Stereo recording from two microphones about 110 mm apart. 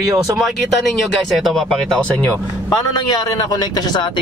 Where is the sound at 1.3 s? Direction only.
Centre (ahead or behind).